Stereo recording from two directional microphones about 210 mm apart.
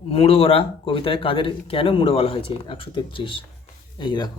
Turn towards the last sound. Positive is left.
turn(degrees=20)  # may be behind; listen again after turning